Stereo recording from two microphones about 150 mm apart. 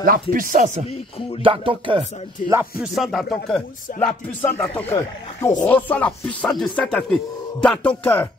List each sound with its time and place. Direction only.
0.0 s speech: 65° right (ahead or behind)
1.4 s speech: 35° right (ahead or behind)
2.8 s speech: centre (ahead or behind)